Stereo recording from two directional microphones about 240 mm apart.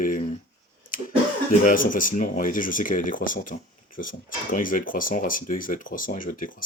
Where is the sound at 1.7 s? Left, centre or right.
Left.